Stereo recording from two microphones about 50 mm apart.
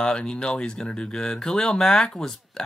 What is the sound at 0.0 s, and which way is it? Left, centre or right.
Speech, centre.